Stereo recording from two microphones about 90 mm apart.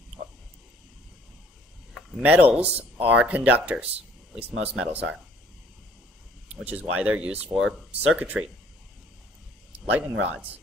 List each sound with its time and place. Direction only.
2.0 s a sound: centre (ahead or behind)
2.2 s speech: 15° right (ahead or behind)
6.6 s speech: 15° right (ahead or behind)
9.9 s speech: 15° right (ahead or behind)